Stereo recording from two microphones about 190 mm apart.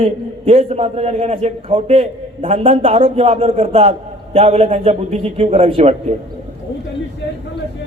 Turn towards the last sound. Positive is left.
turn(degrees=-35)  # may be behind; listen again after turning